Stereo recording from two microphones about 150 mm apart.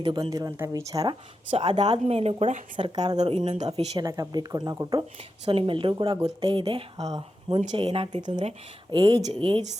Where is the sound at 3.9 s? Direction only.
25° right (ahead or behind).